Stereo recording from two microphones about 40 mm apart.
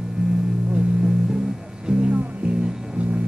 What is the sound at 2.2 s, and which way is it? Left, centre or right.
Music, right.